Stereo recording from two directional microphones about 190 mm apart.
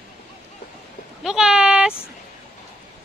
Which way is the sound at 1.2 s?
5° right (ahead or behind).